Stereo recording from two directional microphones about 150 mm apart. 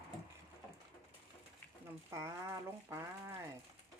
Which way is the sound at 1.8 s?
20° right (ahead or behind).